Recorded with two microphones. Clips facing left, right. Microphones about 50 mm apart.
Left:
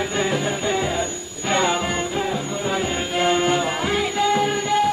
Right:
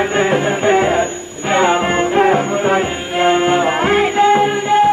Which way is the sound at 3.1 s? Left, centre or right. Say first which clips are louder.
Right 7 dB; right.